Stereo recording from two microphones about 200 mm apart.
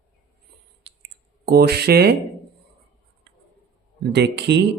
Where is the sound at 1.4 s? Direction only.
50° right (ahead or behind).